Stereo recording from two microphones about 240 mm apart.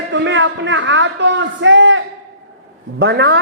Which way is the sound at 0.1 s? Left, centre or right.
Right.